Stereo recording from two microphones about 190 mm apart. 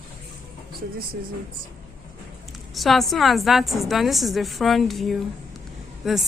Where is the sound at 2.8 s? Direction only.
Centre (ahead or behind).